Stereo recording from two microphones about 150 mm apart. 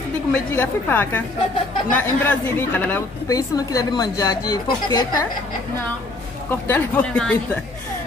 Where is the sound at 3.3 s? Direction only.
25° left (ahead or behind).